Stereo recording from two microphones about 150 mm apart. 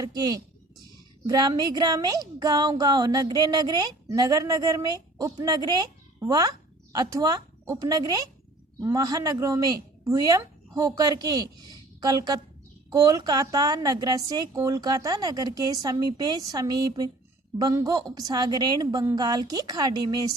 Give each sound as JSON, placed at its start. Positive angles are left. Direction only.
{"t": 0.0, "sound": "a woman's voice", "side_deg": -25}